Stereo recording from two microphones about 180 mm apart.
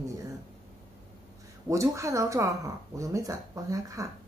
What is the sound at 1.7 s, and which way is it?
Speech, 15° right (ahead or behind).